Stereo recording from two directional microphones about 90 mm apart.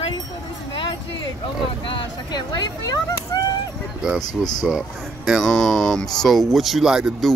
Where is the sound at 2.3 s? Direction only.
50° left (ahead or behind).